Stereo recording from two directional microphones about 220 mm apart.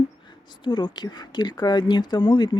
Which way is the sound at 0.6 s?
20° left (ahead or behind).